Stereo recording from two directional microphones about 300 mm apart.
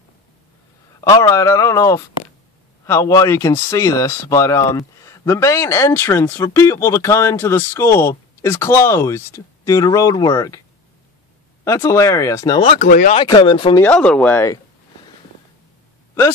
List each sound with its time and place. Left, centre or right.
1.0 s speech: centre
11.6 s speech: centre; by 13.2 s left
13.2 s speech: centre
13.8 s speech: centre